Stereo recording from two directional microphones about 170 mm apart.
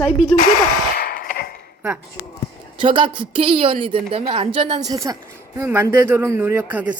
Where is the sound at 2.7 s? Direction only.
30° right (ahead or behind).